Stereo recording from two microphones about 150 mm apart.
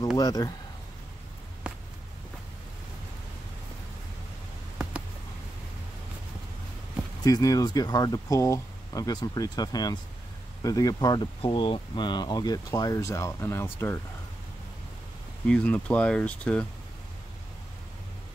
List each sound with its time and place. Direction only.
0.2 s speech: 25° left (ahead or behind)
1.6 s a sound: 10° right (ahead or behind)
7.2 s speech: 25° left (ahead or behind)
15.4 s speech: 5° left (ahead or behind)